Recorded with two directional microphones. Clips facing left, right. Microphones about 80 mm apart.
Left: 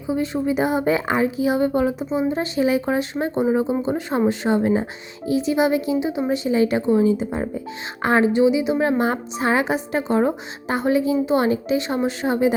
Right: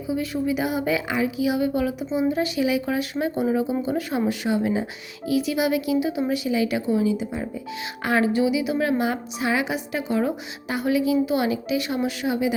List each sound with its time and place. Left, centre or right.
0.1 s speech: left
8.0 s speech: left